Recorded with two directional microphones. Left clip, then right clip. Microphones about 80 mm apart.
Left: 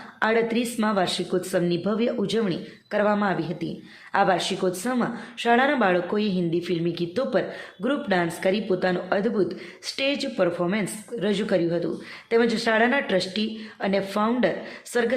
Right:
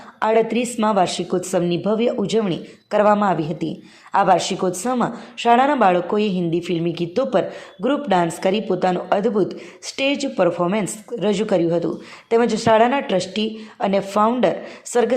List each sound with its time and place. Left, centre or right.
0.2 s speech: right
2.9 s a woman's voice: right
4.8 s speech: right
8.4 s a woman's voice: right
8.7 s speech: right